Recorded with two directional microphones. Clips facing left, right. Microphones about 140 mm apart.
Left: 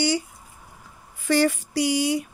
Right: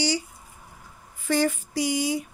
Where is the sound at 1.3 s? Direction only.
80° left.